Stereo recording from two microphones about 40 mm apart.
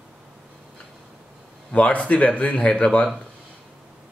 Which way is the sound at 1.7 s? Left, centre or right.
Left.